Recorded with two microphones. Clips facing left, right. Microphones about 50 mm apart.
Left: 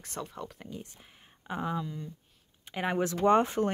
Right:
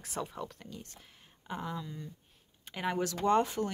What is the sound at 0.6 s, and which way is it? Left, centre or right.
Speech, centre.